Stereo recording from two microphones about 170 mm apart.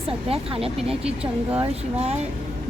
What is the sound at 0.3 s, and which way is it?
A woman's voice, 35° right (ahead or behind).